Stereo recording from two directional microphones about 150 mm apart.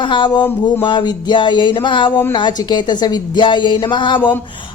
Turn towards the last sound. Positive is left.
turn(degrees=30)  # may be behind; listen again after turning